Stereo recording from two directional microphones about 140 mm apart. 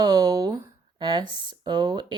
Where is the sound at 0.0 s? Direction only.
30° right (ahead or behind).